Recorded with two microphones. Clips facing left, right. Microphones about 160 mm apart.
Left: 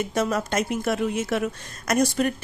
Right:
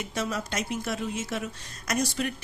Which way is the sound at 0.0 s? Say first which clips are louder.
Left 7 dB; 50° left (ahead or behind).